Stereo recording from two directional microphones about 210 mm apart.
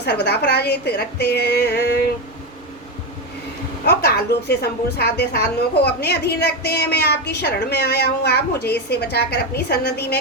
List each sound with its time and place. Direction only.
0.0 s a woman's voice: 50° left (ahead or behind)
3.8 s a woman's voice: 50° left (ahead or behind)